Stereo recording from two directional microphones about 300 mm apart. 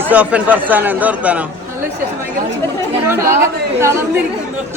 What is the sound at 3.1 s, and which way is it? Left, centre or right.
Speech, centre.